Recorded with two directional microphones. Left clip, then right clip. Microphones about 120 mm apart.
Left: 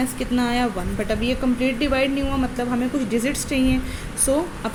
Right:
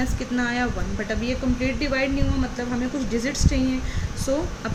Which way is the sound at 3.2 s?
25° left (ahead or behind).